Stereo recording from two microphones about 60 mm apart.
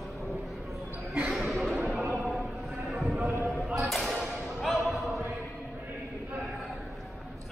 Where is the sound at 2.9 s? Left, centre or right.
Centre.